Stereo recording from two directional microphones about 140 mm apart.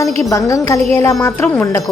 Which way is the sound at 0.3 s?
25° left (ahead or behind).